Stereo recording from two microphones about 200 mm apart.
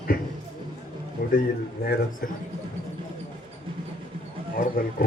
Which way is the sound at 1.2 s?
50° left (ahead or behind).